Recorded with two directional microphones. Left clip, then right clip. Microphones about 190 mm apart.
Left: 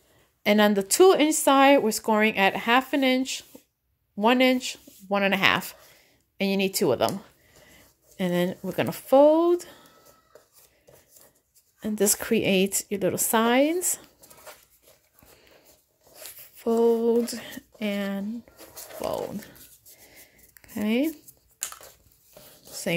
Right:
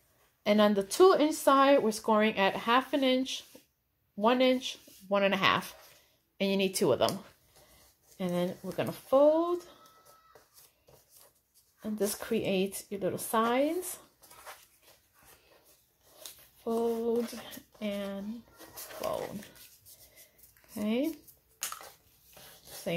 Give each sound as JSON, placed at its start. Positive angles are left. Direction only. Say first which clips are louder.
{"t": 0.4, "sound": "speech", "louder": "left 5 dB", "side_deg": 40}
{"t": 8.2, "sound": "speech", "louder": "left 7 dB", "side_deg": 50}
{"t": 11.8, "sound": "speech", "louder": "left 8 dB", "side_deg": 55}
{"t": 16.2, "sound": "speech", "louder": "left 5 dB", "side_deg": 50}
{"t": 20.7, "sound": "speech", "louder": "left 6 dB", "side_deg": 40}
{"t": 21.6, "sound": "a sound", "louder": "left 2 dB", "side_deg": 30}